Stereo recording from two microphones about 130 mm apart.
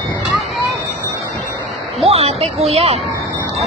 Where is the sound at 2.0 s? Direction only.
50° right (ahead or behind).